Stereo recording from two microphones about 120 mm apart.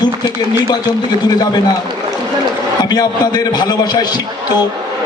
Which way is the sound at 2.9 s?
35° left (ahead or behind).